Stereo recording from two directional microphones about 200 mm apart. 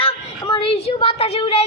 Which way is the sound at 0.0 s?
25° left (ahead or behind).